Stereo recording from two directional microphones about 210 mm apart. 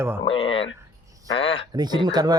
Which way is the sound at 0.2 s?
25° left (ahead or behind).